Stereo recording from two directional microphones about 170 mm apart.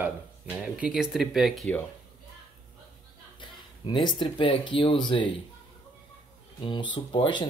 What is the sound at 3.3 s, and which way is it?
Speech, 30° left (ahead or behind).